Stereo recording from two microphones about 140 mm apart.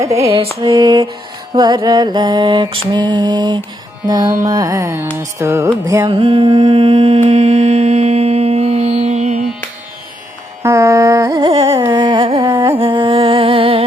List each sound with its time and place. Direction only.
0.0 s music: 20° right (ahead or behind)
0.6 s mantra: 30° right (ahead or behind)
4.1 s music: 30° right (ahead or behind)
6.1 s mantra: 40° right (ahead or behind)
7.3 s music: 50° right (ahead or behind)
10.6 s carnatic music: 20° right (ahead or behind)
11.5 s carnatic music: 45° right (ahead or behind)
11.9 s carnatic music: 35° right (ahead or behind)
12.5 s music: 35° right (ahead or behind)